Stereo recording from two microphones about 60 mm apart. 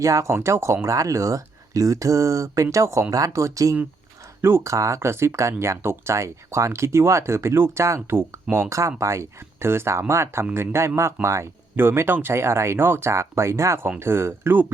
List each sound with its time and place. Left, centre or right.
0.0 s speech: right
0.3 s speech: right
4.4 s speech: right
4.7 s speech: right
4.9 s speech: right
11.8 s speech: right